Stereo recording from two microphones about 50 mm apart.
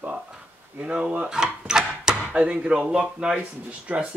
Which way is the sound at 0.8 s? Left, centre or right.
Centre.